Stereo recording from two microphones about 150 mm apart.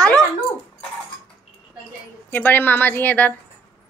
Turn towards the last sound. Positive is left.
turn(degrees=10)  # may be behind; listen again after turning